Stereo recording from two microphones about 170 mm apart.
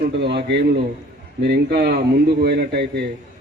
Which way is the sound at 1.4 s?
75° right (ahead or behind).